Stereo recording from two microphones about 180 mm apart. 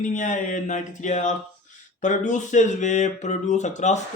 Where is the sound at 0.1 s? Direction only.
45° left (ahead or behind).